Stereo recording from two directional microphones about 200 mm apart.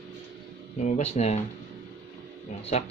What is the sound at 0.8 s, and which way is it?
Speech, 35° left (ahead or behind).